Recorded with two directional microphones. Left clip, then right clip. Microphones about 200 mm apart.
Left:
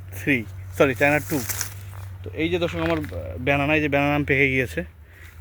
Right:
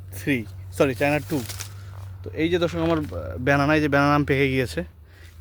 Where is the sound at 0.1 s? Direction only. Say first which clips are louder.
Left 3 dB; 15° right (ahead or behind).